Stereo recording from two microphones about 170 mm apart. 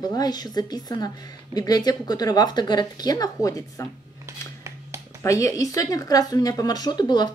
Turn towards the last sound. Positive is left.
turn(degrees=25)  # may be behind; listen again after turning